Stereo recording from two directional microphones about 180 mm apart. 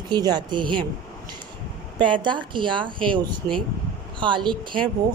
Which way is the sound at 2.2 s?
25° right (ahead or behind).